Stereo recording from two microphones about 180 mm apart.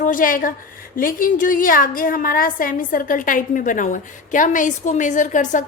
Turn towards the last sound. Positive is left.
turn(degrees=45)  # may be behind; listen again after turning